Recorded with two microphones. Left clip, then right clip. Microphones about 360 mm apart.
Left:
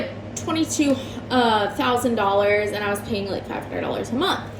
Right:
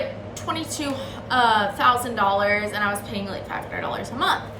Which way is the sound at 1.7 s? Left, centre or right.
Left.